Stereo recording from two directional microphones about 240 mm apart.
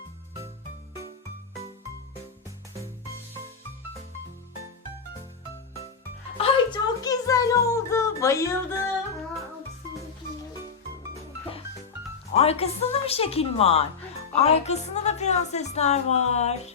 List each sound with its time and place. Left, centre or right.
6.3 s music: centre
12.3 s a woman's voice: left